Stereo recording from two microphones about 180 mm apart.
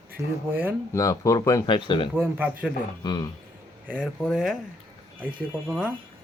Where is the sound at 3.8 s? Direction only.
10° right (ahead or behind).